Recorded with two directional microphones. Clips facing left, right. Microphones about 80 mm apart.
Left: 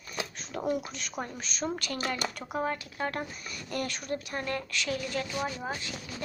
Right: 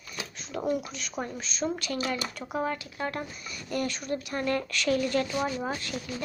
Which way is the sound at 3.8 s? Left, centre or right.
Left.